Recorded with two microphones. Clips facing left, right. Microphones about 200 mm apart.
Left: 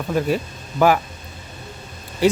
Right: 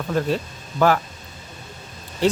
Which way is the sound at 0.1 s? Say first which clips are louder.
Left 2 dB; 10° left (ahead or behind).